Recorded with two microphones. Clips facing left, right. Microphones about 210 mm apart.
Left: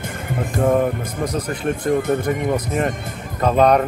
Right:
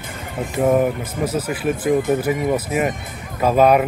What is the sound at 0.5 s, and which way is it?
Speech, 5° right (ahead or behind).